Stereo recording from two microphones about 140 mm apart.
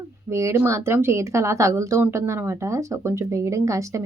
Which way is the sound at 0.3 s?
20° right (ahead or behind).